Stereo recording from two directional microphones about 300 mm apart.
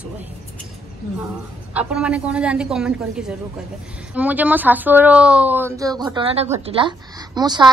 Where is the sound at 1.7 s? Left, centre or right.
Centre.